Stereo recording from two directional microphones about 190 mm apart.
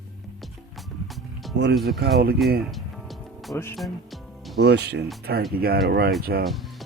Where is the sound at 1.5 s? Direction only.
65° right (ahead or behind).